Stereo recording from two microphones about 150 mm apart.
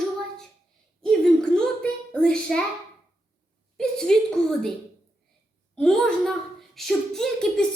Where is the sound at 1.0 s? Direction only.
5° left (ahead or behind).